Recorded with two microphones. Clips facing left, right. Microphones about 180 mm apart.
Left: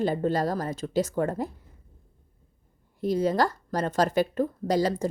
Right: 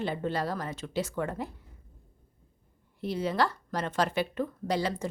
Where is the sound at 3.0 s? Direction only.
40° left (ahead or behind).